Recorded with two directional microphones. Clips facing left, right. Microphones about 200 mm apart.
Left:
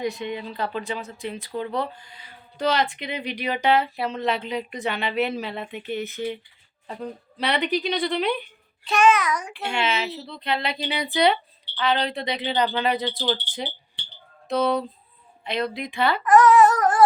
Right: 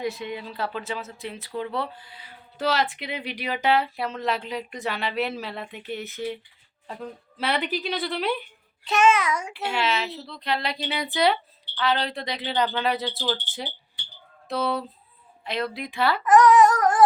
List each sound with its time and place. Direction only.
0.0 s speech: centre (ahead or behind)
8.9 s a child's voice: 25° right (ahead or behind)
9.6 s speech: centre (ahead or behind)
16.2 s a sound: 15° right (ahead or behind)